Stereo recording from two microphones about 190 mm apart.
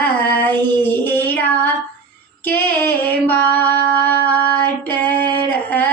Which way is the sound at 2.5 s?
10° left (ahead or behind).